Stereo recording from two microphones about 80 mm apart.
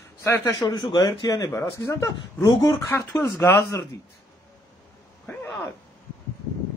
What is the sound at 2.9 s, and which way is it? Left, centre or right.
Speech, left.